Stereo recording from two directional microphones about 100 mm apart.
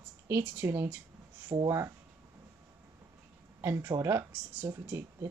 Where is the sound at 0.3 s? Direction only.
20° right (ahead or behind).